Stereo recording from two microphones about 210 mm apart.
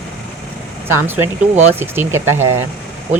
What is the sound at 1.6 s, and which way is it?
Speech, 10° right (ahead or behind).